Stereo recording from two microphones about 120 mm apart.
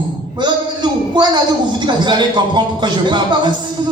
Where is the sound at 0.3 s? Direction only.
40° right (ahead or behind).